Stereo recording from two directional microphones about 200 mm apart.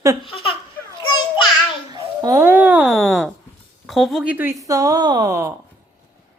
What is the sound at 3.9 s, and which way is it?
A woman's voice, centre (ahead or behind).